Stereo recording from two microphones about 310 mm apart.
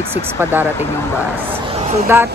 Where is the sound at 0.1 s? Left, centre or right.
Centre.